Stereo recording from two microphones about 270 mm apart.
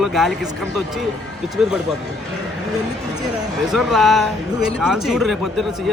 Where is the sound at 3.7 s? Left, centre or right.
Centre.